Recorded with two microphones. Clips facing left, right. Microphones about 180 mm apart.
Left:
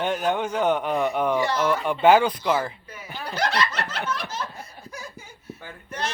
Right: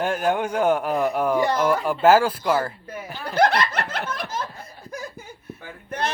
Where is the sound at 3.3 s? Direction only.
55° right (ahead or behind).